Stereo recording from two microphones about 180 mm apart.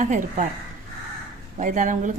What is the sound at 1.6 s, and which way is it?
Speech, 45° right (ahead or behind).